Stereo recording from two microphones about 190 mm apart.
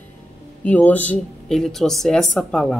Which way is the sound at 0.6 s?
10° left (ahead or behind).